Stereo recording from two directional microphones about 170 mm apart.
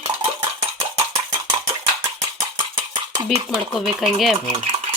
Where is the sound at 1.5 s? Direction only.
30° right (ahead or behind).